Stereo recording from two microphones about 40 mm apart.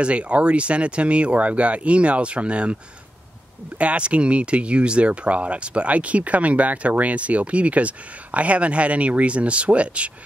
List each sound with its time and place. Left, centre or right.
0.0 s speech: right